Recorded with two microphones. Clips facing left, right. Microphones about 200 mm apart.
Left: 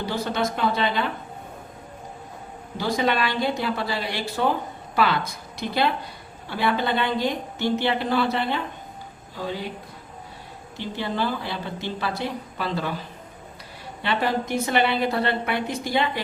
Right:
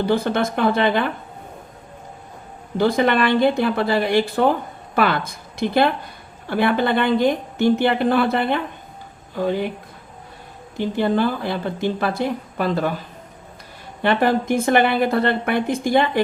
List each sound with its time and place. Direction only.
0.0 s a woman's voice: 55° right (ahead or behind)
2.7 s a woman's voice: 55° right (ahead or behind)
10.8 s a woman's voice: 50° right (ahead or behind)
14.0 s a woman's voice: 50° right (ahead or behind)